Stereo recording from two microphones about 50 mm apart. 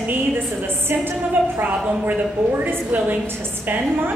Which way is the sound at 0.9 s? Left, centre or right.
Right.